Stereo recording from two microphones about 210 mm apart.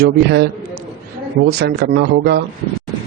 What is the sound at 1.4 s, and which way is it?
Speech, 50° right (ahead or behind).